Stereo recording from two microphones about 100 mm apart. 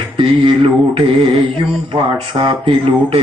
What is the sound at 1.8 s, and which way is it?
Speech, 60° right (ahead or behind).